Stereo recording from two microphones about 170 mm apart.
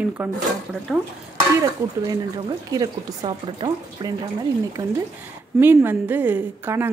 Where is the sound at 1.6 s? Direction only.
20° right (ahead or behind).